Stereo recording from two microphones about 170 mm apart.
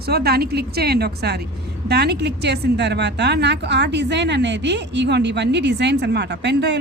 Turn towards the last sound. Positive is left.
turn(degrees=-90)